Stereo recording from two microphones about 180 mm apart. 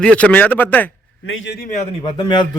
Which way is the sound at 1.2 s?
90° left.